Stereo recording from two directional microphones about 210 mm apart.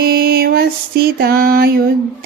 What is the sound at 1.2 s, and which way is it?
Female singing, 45° right (ahead or behind).